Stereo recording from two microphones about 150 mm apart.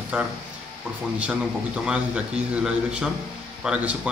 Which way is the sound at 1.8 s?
10° right (ahead or behind).